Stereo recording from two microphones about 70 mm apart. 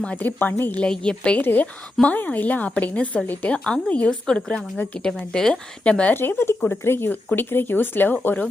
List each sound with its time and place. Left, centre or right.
0.2 s speech: left
0.8 s speech: centre
1.4 s speech: left
6.1 s speech: left